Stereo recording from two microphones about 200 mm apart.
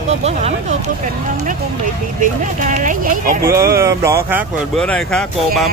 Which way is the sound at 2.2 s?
40° right (ahead or behind).